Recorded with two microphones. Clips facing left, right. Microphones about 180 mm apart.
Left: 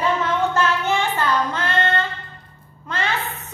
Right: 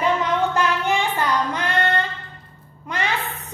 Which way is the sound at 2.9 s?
15° right (ahead or behind).